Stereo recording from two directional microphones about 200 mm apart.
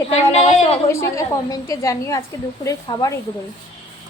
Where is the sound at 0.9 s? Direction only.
15° left (ahead or behind).